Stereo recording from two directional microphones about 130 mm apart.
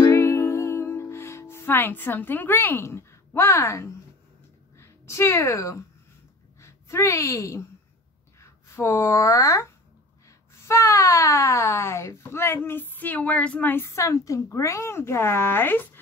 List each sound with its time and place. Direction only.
0.0 s music: 20° left (ahead or behind)
4.7 s a woman's voice: 20° left (ahead or behind)